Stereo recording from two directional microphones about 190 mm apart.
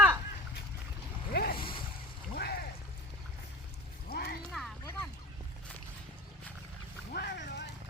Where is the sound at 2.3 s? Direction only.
55° left (ahead or behind).